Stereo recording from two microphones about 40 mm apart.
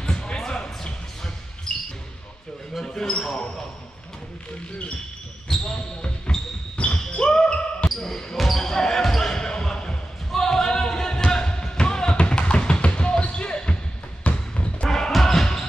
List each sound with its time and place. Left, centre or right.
0.0 s basketball bounce: left
2.8 s basketball bounce: centre
5.8 s basketball bounce: left
7.9 s basketball bounce: centre
11.3 s music: centre
14.2 s basketball bounce: left
14.9 s music: centre